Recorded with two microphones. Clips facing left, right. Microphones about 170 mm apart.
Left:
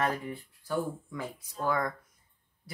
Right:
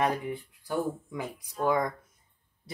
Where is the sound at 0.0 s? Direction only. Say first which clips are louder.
Right 3 dB; 15° right (ahead or behind).